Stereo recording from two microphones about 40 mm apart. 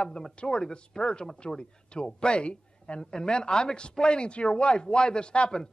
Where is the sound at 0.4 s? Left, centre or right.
Left.